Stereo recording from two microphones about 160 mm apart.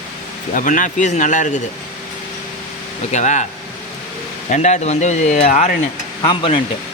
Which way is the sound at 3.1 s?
45° left (ahead or behind).